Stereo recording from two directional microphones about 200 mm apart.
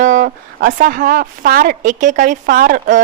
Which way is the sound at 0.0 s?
40° right (ahead or behind).